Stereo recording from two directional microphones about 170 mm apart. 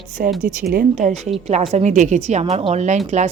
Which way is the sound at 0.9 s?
45° right (ahead or behind).